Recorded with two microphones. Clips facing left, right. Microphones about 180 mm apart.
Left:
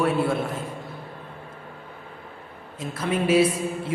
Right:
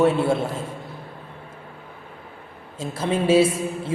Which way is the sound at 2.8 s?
25° right (ahead or behind).